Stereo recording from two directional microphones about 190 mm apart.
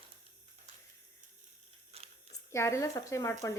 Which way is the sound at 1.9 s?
30° right (ahead or behind).